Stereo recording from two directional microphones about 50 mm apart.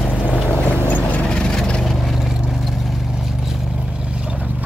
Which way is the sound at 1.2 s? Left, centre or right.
Centre.